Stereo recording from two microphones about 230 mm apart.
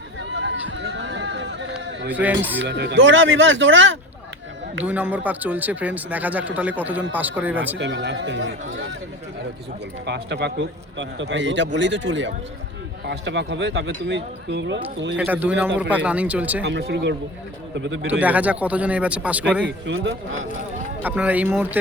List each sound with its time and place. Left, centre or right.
0.2 s run: right
2.0 s speech: centre
2.6 s a man's voice: right
4.8 s speech: centre
7.8 s a man's voice: right
10.1 s a man's voice: right
15.2 s speech: centre
16.6 s a man's voice: right
18.1 s speech: centre
19.8 s a man's voice: right
21.0 s speech: centre